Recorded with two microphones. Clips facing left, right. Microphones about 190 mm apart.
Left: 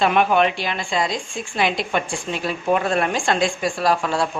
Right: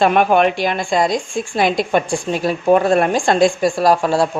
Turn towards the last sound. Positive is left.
turn(degrees=-40)  # may be behind; listen again after turning